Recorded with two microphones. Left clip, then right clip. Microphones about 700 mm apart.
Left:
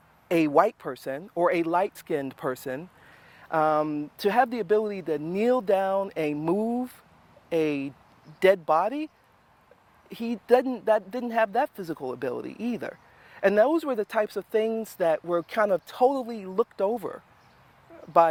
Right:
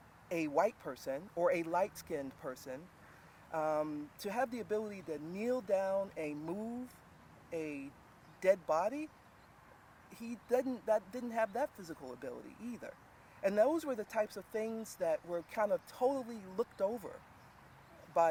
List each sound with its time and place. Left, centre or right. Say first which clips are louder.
0.3 s speech: left 12 dB; left
10.1 s speech: left 14 dB; left